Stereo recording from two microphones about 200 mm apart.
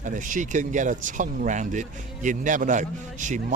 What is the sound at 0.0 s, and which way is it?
Speech, 40° right (ahead or behind).